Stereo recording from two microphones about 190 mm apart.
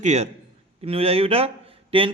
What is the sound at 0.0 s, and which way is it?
A man's voice, 35° right (ahead or behind).